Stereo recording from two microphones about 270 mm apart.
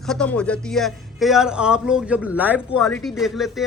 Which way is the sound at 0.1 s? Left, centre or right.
Centre.